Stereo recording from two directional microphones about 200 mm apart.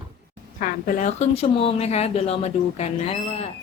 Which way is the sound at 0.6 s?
40° left (ahead or behind).